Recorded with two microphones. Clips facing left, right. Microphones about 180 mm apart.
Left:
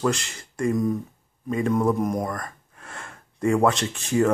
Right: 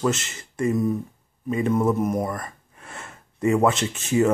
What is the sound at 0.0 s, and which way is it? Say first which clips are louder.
Speech: right 1 dB; 5° right (ahead or behind).